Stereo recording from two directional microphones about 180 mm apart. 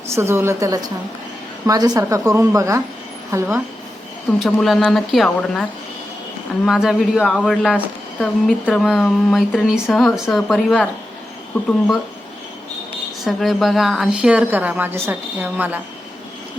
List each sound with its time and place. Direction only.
0.1 s a woman's voice: 15° right (ahead or behind)
4.3 s speech: 5° left (ahead or behind)
6.7 s speech: 5° right (ahead or behind)
13.2 s a woman's voice: centre (ahead or behind)